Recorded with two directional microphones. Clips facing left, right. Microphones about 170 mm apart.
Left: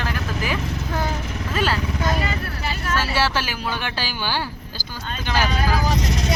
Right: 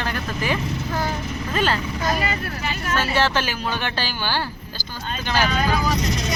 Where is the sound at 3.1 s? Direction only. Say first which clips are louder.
Right 1 dB; 10° left (ahead or behind).